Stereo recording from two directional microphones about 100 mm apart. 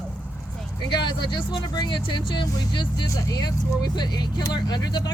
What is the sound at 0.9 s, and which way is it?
Speech, 50° left (ahead or behind).